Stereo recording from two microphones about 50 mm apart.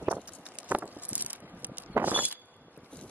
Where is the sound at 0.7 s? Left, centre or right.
Right.